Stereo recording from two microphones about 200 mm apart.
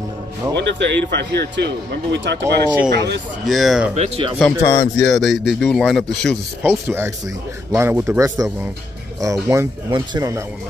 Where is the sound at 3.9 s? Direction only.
30° right (ahead or behind).